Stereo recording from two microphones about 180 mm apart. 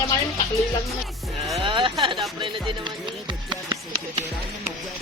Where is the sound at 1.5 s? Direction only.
30° right (ahead or behind).